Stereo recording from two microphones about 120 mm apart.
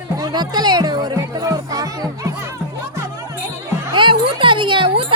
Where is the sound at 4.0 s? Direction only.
45° right (ahead or behind).